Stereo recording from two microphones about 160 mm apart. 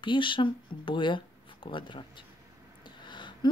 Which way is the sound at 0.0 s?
30° left (ahead or behind).